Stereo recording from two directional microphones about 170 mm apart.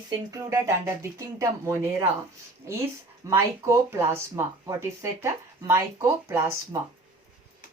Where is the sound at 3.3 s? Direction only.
15° right (ahead or behind).